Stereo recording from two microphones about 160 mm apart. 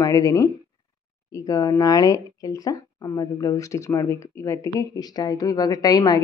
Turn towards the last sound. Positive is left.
turn(degrees=25)  # may be behind; listen again after turning